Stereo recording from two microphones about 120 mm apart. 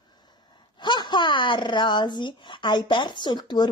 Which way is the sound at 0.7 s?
40° left (ahead or behind).